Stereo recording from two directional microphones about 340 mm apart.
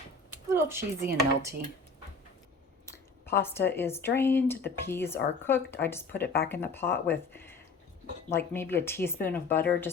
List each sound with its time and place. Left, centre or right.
0.5 s speech: centre
2.8 s speech: centre
6.2 s speech: left
6.5 s speech: centre